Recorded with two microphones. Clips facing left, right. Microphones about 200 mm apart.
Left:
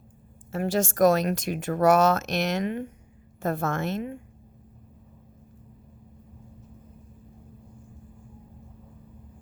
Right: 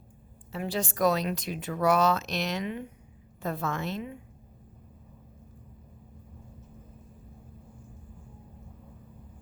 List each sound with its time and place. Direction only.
0.5 s speech: 45° left (ahead or behind)